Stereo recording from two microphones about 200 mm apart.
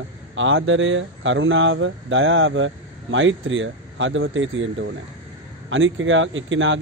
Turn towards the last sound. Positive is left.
turn(degrees=-70)  # may be behind; listen again after turning